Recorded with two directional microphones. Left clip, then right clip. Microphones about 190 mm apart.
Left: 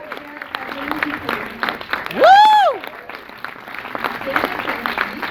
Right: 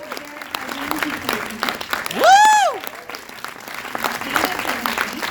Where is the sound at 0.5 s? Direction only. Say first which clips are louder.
Even; 85° right.